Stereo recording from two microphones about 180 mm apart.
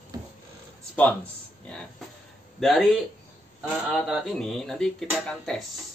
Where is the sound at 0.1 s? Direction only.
20° right (ahead or behind).